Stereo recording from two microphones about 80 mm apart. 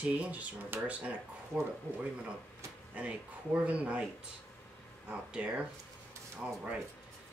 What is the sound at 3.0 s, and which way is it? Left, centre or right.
Speech, centre.